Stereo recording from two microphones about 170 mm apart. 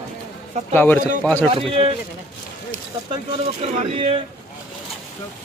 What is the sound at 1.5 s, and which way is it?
Speech, 35° right (ahead or behind).